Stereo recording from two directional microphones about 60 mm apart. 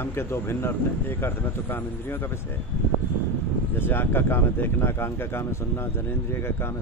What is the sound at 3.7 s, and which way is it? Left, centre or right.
A man's voice, left.